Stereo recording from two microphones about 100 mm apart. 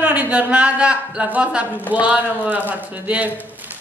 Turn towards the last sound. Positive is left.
turn(degrees=-15)  # may be behind; listen again after turning